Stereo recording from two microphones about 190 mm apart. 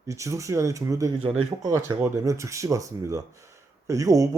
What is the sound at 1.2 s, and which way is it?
Speech, 35° right (ahead or behind).